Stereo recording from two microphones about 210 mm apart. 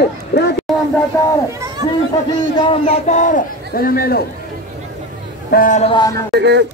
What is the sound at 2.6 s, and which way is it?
A man's voice, 30° left (ahead or behind).